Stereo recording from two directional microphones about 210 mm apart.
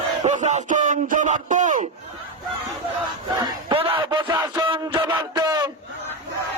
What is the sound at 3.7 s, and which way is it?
Speech, 25° right (ahead or behind).